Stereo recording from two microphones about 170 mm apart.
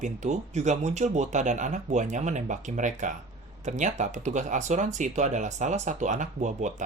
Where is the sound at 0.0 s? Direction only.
45° right (ahead or behind).